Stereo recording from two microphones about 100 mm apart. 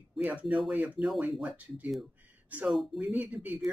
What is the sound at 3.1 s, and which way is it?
Speech, 15° right (ahead or behind).